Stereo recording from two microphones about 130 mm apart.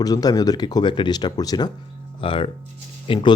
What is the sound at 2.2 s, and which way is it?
Speech, 40° left (ahead or behind).